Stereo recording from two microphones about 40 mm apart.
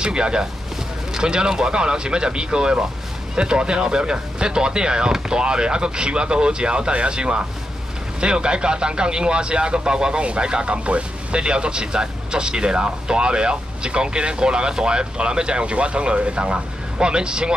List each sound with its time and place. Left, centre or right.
0.0 s speech: right